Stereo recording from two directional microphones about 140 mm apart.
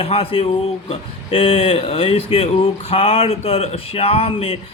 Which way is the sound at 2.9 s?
45° left (ahead or behind).